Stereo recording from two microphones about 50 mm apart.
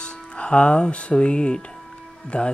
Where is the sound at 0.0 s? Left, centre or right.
Centre.